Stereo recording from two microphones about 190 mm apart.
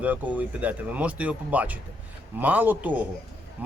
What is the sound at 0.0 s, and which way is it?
Speech, 10° right (ahead or behind).